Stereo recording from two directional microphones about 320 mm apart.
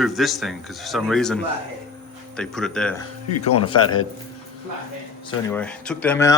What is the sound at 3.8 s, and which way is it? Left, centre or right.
Speech, left.